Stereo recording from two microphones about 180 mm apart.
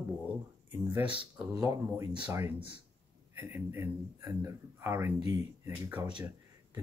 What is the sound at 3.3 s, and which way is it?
Speech, 15° right (ahead or behind).